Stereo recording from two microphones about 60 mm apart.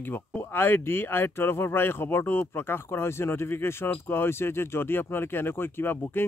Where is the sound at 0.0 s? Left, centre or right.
Left.